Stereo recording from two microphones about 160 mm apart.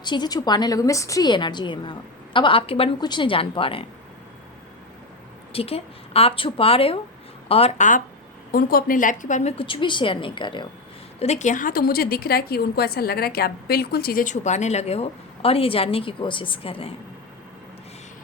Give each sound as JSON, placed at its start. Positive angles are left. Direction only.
{"t": 0.0, "sound": "a woman's voice", "side_deg": 25}
{"t": 5.5, "sound": "a woman's voice", "side_deg": 40}
{"t": 8.5, "sound": "a woman's voice", "side_deg": 60}
{"t": 11.2, "sound": "a woman's voice", "side_deg": 45}